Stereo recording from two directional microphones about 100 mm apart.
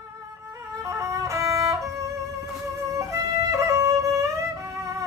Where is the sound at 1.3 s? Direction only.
30° right (ahead or behind).